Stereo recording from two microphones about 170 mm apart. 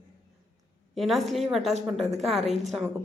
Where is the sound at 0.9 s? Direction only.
Centre (ahead or behind).